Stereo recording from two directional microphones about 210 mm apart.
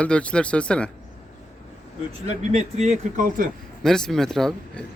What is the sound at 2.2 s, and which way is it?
Speech, 35° right (ahead or behind).